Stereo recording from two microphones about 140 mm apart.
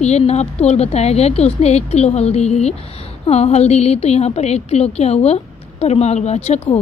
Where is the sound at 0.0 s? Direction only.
50° left (ahead or behind).